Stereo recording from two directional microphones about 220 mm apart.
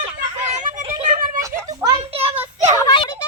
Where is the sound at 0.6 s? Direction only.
30° right (ahead or behind).